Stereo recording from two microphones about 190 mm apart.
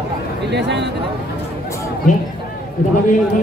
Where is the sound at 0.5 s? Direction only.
65° right (ahead or behind).